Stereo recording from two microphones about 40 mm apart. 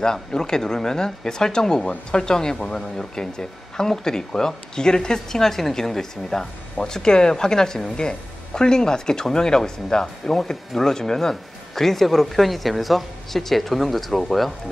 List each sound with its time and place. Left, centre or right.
0.0 s a woman's voice: centre